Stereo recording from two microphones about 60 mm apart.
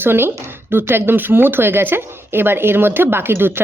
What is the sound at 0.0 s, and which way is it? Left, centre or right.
A woman's voice, right.